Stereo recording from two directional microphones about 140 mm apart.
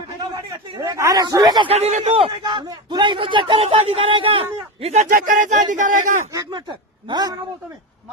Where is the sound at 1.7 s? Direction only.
50° right (ahead or behind).